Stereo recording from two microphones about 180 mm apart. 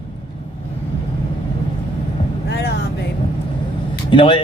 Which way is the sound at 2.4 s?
70° left (ahead or behind).